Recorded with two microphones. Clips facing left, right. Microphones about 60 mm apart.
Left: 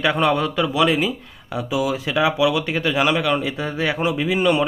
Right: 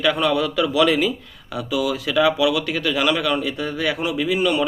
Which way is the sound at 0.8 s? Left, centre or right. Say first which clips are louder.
Right 1 dB; centre.